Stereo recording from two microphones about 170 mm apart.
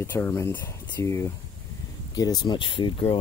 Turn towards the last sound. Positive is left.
turn(degrees=30)  # may be behind; listen again after turning